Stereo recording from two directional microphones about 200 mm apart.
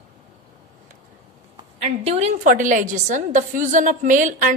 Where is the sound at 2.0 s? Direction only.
35° right (ahead or behind).